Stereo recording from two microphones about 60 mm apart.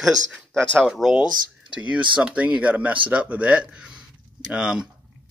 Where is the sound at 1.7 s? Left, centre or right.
Right.